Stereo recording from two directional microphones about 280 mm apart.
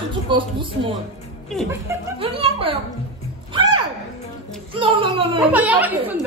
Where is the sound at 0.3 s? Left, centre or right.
Centre.